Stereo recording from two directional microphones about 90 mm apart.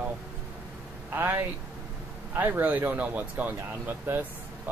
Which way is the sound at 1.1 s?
25° right (ahead or behind).